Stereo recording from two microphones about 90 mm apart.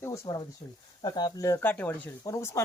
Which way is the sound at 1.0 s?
55° left (ahead or behind).